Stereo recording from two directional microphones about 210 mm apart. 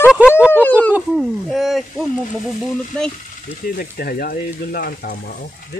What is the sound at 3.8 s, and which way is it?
Speech, 45° left (ahead or behind).